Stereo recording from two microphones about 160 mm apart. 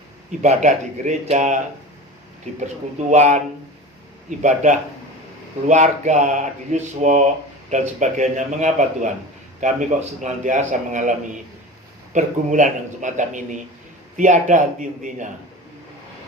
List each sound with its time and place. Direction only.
0.3 s a man's voice: 50° right (ahead or behind)
3.1 s a man's voice: 50° right (ahead or behind)
5.6 s a man's voice: 50° right (ahead or behind)
12.1 s a man's voice: 50° right (ahead or behind)